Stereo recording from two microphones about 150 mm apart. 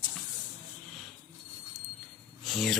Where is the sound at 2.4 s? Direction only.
Centre (ahead or behind).